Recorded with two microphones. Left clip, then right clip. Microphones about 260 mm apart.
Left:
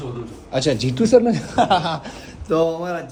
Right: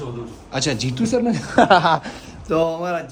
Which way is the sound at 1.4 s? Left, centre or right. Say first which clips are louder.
Right 4 dB; right.